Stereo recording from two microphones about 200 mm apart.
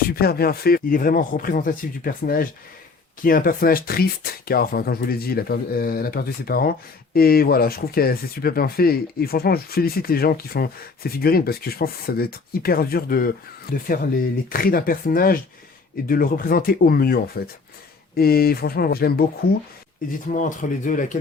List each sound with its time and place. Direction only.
0.2 s speech: 50° left (ahead or behind)
20.3 s speech: 40° left (ahead or behind)